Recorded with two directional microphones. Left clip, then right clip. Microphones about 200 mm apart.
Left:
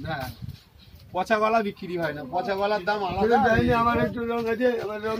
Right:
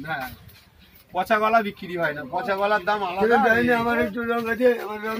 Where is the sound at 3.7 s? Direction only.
45° right (ahead or behind).